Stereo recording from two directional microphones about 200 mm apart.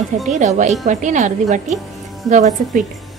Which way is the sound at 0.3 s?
35° right (ahead or behind).